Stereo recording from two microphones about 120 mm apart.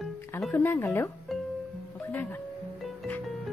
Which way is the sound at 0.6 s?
20° left (ahead or behind).